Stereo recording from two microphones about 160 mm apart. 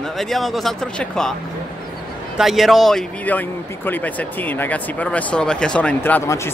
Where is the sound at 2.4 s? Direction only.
Centre (ahead or behind); by 6.5 s 15° left (ahead or behind).